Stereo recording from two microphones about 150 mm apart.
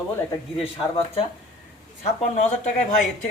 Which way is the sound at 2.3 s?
50° left (ahead or behind).